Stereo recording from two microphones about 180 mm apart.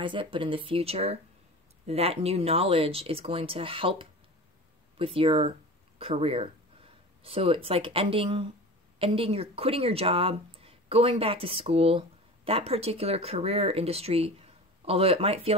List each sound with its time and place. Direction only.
0.0 s speech: 30° right (ahead or behind)